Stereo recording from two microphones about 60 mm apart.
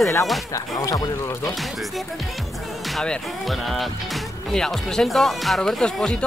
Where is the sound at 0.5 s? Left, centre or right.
Left.